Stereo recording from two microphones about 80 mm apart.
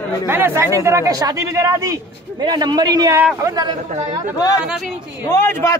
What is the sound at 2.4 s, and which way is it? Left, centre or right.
Speech, right.